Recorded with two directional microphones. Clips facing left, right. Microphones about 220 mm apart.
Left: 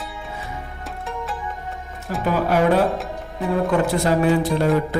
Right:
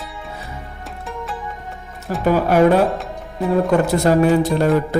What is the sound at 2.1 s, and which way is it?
Music, 40° right (ahead or behind).